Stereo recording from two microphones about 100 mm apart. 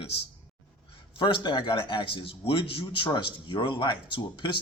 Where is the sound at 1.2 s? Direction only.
50° left (ahead or behind).